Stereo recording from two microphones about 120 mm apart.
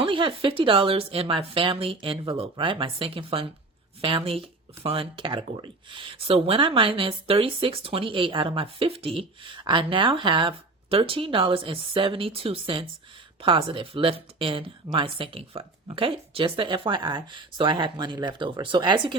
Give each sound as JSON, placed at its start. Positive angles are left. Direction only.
{"t": 0.0, "sound": "speech", "side_deg": -45}